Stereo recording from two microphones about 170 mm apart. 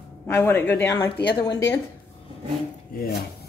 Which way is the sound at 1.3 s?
25° left (ahead or behind).